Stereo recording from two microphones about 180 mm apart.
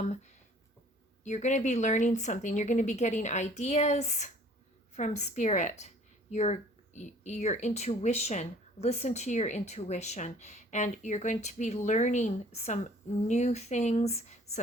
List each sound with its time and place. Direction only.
1.2 s speech: 40° left (ahead or behind)